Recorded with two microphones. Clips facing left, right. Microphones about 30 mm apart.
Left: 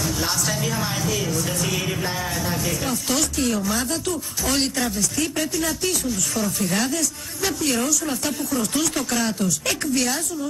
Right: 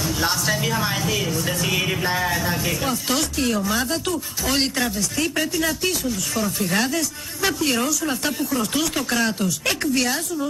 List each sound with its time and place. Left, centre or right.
0.0 s speech: centre